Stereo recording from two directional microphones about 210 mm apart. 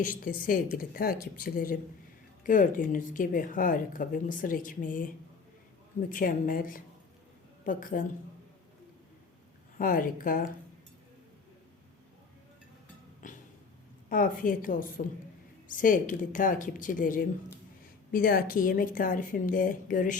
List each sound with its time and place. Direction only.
0.0 s a woman's voice: 40° left (ahead or behind)
9.7 s speech: 40° left (ahead or behind)
13.2 s cat: 40° left (ahead or behind)
14.1 s speech: 40° left (ahead or behind)